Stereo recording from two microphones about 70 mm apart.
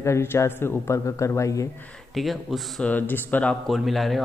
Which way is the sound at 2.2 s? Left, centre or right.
Centre.